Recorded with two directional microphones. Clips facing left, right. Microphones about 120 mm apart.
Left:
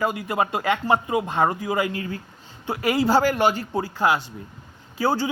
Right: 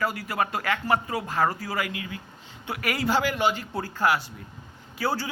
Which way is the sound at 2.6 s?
25° left (ahead or behind).